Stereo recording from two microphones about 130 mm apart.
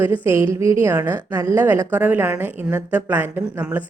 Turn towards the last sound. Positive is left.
turn(degrees=-15)  # may be behind; listen again after turning